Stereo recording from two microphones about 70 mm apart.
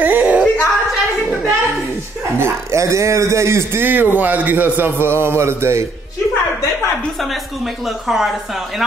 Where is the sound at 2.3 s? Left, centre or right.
Right.